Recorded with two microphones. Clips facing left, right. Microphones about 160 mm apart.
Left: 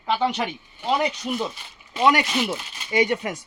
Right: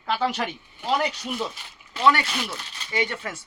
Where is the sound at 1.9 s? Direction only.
15° left (ahead or behind).